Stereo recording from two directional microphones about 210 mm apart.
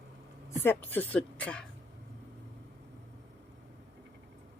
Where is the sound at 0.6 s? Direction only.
10° left (ahead or behind).